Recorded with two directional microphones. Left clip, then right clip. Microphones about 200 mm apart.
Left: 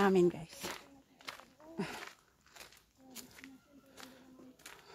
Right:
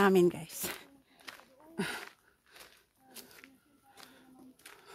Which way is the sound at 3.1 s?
15° right (ahead or behind).